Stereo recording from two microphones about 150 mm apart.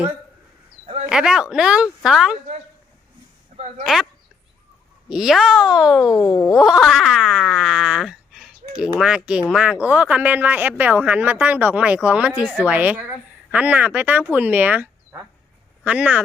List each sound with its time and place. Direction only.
1.1 s speech: 5° right (ahead or behind)
5.0 s speech: 5° right (ahead or behind)
6.1 s speech: 25° left (ahead or behind)
6.6 s speech: centre (ahead or behind)